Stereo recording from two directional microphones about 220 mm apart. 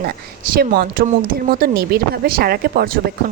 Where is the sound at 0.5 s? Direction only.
45° right (ahead or behind).